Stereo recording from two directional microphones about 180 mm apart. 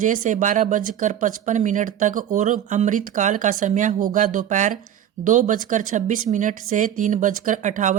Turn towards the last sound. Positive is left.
turn(degrees=-45)  # may be behind; listen again after turning